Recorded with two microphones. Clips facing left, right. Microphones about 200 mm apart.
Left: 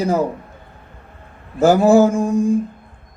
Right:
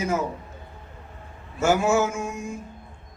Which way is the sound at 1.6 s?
35° left (ahead or behind).